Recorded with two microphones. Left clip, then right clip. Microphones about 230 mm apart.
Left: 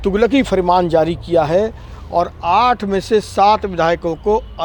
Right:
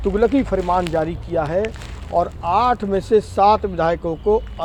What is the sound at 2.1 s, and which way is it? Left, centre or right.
Speech, left.